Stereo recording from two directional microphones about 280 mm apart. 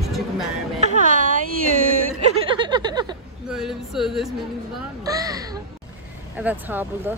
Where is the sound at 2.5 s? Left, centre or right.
Centre.